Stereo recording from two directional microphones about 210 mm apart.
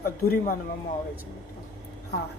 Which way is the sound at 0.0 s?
45° left (ahead or behind).